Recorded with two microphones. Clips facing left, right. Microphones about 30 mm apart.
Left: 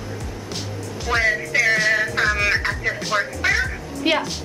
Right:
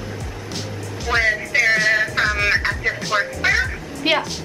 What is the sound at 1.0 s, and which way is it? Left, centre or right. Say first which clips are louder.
Music: right 1 dB; centre.